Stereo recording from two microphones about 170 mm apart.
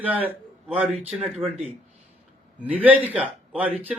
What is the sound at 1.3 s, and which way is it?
Speech, 40° right (ahead or behind).